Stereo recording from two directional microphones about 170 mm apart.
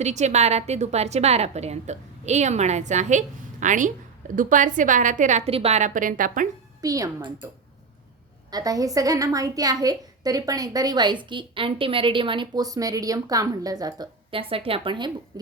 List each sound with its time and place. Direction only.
0.0 s a woman's voice: 45° right (ahead or behind)
6.8 s a woman's voice: 20° right (ahead or behind)
8.4 s a woman's voice: 20° right (ahead or behind)